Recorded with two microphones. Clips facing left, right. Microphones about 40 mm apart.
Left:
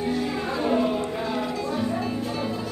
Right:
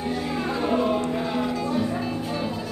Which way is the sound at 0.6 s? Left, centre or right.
Centre.